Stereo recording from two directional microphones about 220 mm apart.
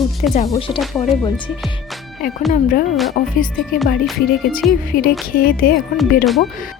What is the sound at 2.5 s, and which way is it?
Speech, 40° left (ahead or behind).